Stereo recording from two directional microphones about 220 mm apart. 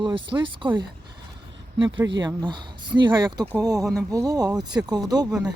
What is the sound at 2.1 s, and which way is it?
Speech, 20° right (ahead or behind).